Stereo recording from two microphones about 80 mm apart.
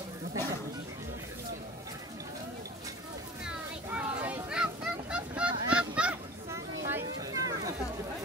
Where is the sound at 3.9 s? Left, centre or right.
Centre.